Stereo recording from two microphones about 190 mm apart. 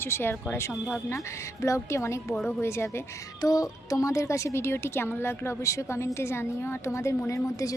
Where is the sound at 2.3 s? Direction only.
Centre (ahead or behind).